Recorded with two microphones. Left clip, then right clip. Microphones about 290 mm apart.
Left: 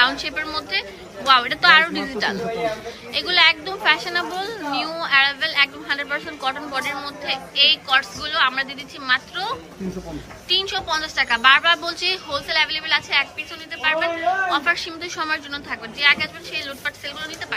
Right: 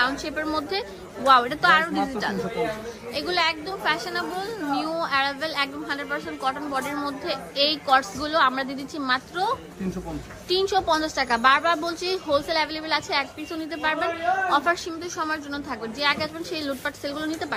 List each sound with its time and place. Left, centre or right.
0.0 s a woman's voice: centre
14.5 s a woman's voice: centre